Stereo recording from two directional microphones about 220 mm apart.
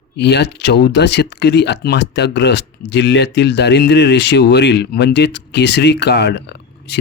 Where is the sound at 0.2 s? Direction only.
50° left (ahead or behind).